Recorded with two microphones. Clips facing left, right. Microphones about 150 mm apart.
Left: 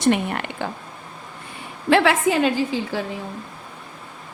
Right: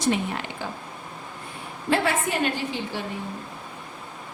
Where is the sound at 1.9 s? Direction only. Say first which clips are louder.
Left 7 dB; 90° left.